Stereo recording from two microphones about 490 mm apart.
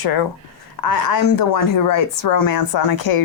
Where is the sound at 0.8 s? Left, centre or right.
Left.